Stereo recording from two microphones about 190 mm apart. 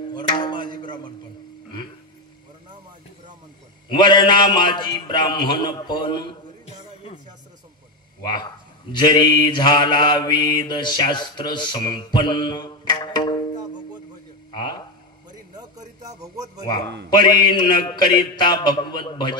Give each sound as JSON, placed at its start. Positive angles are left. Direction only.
{"t": 0.4, "sound": "a sound", "side_deg": 25}
{"t": 3.9, "sound": "mantra", "side_deg": 25}
{"t": 8.9, "sound": "mantra", "side_deg": 25}
{"t": 14.5, "sound": "a sound", "side_deg": 25}
{"t": 16.2, "sound": "speech", "side_deg": -20}
{"t": 16.8, "sound": "a man's voice", "side_deg": -65}
{"t": 17.1, "sound": "mantra", "side_deg": 25}